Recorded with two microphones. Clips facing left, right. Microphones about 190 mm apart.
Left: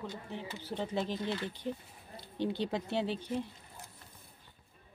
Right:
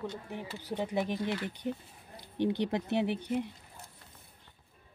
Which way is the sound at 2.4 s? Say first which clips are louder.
Right 4 dB; 15° right (ahead or behind).